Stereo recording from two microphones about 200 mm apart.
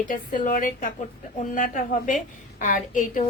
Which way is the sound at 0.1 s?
45° left (ahead or behind).